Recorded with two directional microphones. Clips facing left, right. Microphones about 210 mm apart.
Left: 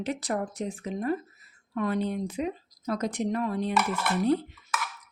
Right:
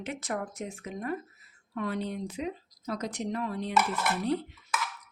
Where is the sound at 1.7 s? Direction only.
50° left (ahead or behind).